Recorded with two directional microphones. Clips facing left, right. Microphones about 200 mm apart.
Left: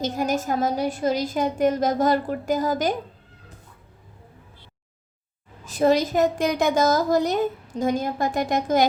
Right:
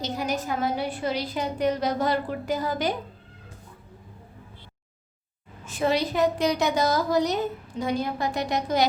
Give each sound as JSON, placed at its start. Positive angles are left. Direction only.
{"t": 0.0, "sound": "a woman's voice", "side_deg": 45}
{"t": 5.6, "sound": "a woman's voice", "side_deg": 40}